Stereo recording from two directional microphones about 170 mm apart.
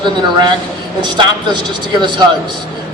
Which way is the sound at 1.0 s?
25° right (ahead or behind).